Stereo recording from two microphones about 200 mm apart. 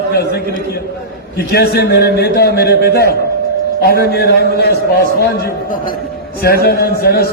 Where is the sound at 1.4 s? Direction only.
50° left (ahead or behind).